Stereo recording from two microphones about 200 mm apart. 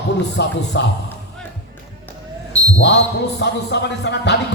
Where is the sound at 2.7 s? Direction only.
60° left (ahead or behind).